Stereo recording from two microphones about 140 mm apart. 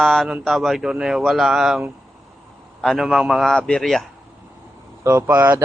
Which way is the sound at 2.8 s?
Centre (ahead or behind).